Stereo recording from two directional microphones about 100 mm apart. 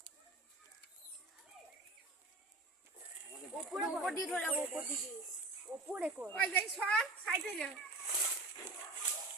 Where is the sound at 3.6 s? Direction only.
Centre (ahead or behind).